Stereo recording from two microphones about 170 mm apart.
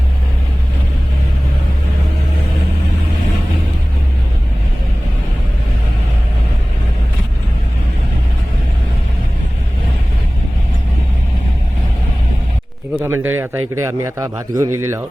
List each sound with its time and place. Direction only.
13.0 s a man's voice: 15° right (ahead or behind)